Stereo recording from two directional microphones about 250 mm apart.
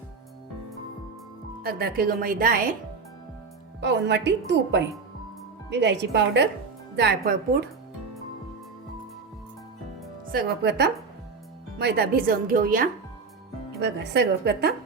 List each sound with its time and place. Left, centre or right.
1.6 s speech: right
3.8 s a woman's voice: right
10.3 s a woman's voice: right